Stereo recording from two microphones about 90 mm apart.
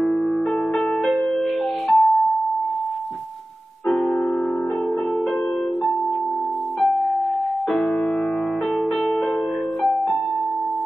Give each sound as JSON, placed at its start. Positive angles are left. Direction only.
{"t": 0.7, "sound": "music", "side_deg": 0}